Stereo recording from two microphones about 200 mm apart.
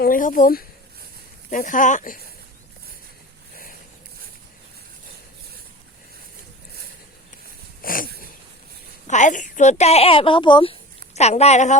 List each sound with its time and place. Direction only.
0.0 s speech: 45° left (ahead or behind)
7.8 s a sound: 45° left (ahead or behind)
9.0 s a woman's voice: 40° left (ahead or behind)